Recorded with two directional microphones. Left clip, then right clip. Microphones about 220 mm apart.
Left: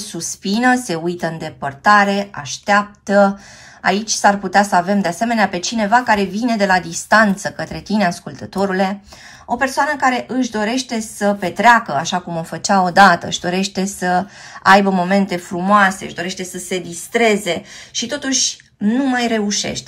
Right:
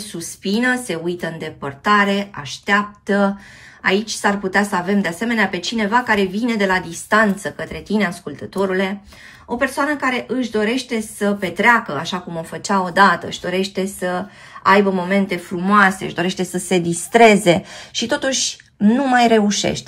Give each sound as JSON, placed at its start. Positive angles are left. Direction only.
{"t": 0.0, "sound": "a woman's voice", "side_deg": 20}
{"t": 9.8, "sound": "a woman's voice", "side_deg": 20}
{"t": 15.6, "sound": "a woman's voice", "side_deg": 5}